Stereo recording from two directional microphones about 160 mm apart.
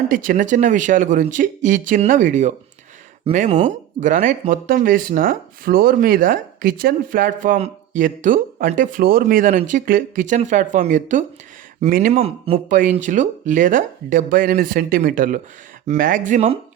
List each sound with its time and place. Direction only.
0.1 s speech: 60° right (ahead or behind)
3.3 s speech: 35° right (ahead or behind)
3.6 s speech: 55° right (ahead or behind)